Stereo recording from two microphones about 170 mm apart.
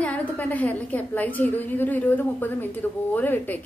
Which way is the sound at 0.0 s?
10° left (ahead or behind).